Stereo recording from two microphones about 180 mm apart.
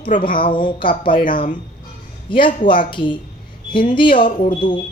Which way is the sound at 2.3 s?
25° left (ahead or behind).